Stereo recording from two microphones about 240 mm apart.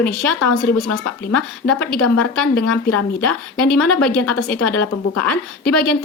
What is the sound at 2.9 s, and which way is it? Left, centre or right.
Speech, left.